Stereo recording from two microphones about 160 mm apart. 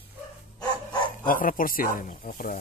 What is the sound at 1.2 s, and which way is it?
Speech, 60° left (ahead or behind).